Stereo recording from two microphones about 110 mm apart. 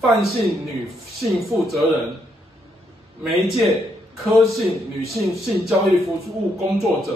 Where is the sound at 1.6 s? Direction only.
Centre (ahead or behind).